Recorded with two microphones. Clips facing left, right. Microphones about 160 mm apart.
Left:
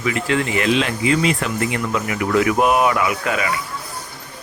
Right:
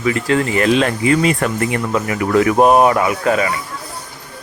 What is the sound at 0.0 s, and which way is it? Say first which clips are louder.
Speech: right 4 dB; 40° right (ahead or behind).